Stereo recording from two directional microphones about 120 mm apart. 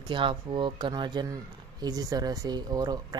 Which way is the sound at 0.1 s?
45° right (ahead or behind).